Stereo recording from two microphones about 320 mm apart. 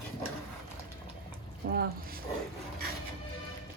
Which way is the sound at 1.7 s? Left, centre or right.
Right.